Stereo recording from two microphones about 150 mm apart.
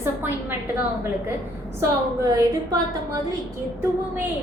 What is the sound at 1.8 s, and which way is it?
A woman's voice, 25° right (ahead or behind).